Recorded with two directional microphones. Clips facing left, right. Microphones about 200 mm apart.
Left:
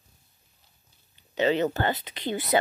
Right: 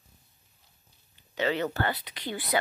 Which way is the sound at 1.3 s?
20° left (ahead or behind).